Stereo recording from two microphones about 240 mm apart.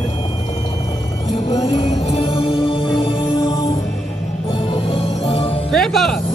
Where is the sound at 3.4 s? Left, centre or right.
Centre.